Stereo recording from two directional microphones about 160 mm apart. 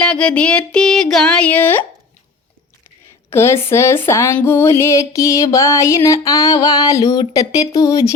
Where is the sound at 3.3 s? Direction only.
15° left (ahead or behind).